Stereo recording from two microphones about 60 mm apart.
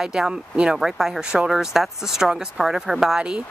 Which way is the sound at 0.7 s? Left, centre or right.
Centre.